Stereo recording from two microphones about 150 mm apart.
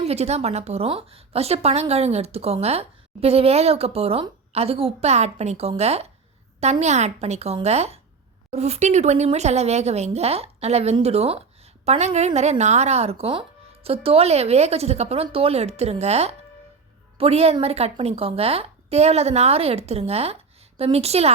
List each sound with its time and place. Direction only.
0.0 s a woman's voice: 45° right (ahead or behind)